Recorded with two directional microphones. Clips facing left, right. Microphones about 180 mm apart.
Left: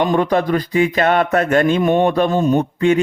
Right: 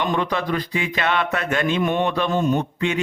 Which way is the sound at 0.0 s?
45° left (ahead or behind).